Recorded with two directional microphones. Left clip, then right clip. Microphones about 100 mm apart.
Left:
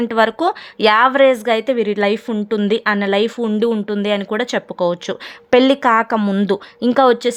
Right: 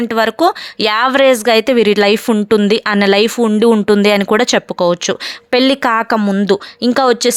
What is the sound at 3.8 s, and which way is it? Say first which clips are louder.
Speech: right 8 dB; 60° right (ahead or behind).